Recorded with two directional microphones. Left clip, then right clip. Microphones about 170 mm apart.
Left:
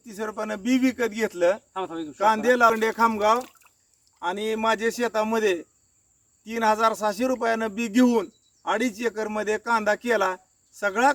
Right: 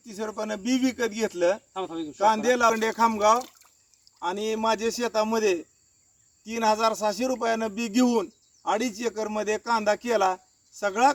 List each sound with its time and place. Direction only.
0.0 s speech: centre (ahead or behind)
4.2 s speech: 5° left (ahead or behind)